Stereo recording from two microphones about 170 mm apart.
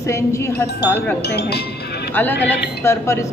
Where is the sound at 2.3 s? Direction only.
75° left (ahead or behind).